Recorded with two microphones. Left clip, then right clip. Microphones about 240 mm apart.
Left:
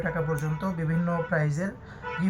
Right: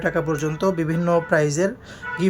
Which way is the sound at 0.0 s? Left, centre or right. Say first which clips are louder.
Right 7 dB; right.